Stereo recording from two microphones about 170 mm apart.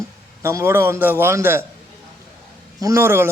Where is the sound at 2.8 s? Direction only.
15° right (ahead or behind).